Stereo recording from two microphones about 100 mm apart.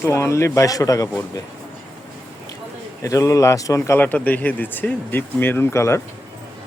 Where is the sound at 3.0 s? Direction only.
35° left (ahead or behind).